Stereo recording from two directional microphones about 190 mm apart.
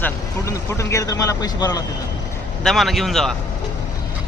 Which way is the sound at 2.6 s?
Centre (ahead or behind).